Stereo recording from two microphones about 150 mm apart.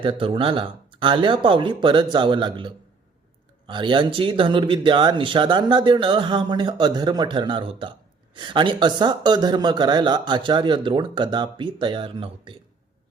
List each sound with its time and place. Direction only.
0.0 s speech: 35° right (ahead or behind)